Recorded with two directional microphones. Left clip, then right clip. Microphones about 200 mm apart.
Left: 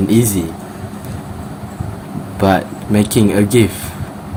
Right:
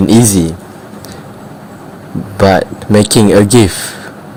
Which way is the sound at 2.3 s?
40° right (ahead or behind).